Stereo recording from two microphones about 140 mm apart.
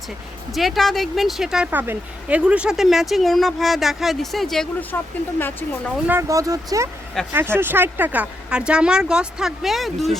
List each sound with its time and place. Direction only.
0.5 s speech: centre (ahead or behind)
6.1 s speech: 20° right (ahead or behind); by 10.2 s centre (ahead or behind)